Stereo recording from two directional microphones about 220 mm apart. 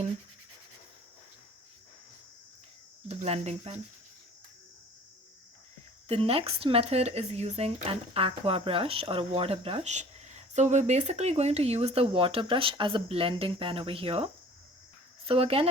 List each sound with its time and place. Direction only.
3.1 s speech: 30° right (ahead or behind)
6.1 s speech: 25° right (ahead or behind)
15.3 s speech: 25° right (ahead or behind)